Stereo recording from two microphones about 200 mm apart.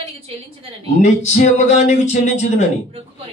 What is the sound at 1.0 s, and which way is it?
Speech, 35° left (ahead or behind).